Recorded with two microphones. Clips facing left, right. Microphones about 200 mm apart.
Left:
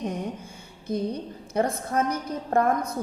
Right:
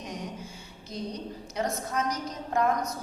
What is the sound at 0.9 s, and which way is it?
A woman's voice, 55° left (ahead or behind).